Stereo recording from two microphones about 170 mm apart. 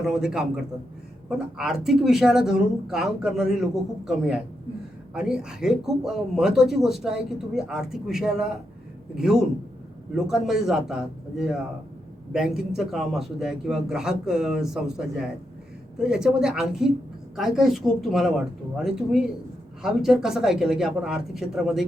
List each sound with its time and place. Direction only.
0.0 s speech: 5° right (ahead or behind)
12.3 s speech: 5° right (ahead or behind)